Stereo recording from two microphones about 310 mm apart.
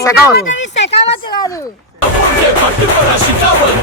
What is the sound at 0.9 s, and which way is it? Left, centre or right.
Speech, centre.